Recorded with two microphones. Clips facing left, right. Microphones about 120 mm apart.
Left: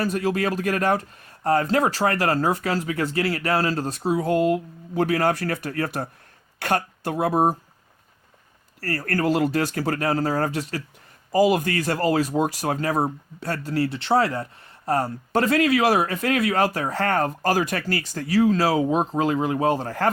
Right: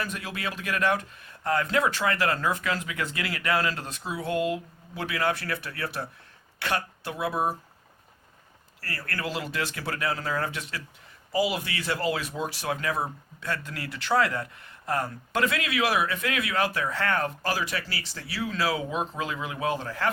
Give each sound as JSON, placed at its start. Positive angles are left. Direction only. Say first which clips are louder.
{"t": 0.0, "sound": "speech", "louder": "left 10 dB", "side_deg": 40}
{"t": 8.8, "sound": "speech", "louder": "left 10 dB", "side_deg": 45}